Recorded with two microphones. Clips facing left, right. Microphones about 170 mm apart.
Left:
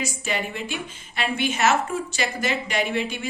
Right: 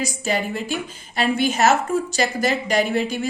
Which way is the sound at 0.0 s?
40° right (ahead or behind).